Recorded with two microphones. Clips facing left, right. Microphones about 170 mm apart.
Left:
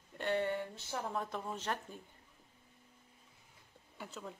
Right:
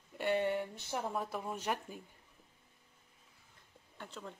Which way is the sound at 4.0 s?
5° left (ahead or behind).